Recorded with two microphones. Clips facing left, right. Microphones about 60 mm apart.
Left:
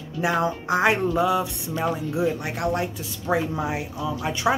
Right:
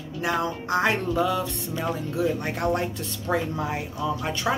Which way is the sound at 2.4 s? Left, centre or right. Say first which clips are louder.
Even; centre.